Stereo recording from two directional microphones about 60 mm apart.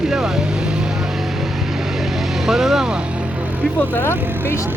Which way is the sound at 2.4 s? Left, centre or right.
Centre.